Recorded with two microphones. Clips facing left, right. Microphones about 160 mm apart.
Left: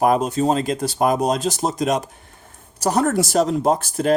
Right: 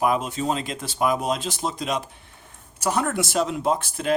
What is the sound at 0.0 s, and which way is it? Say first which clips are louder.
Speech: left 6 dB; 40° left (ahead or behind).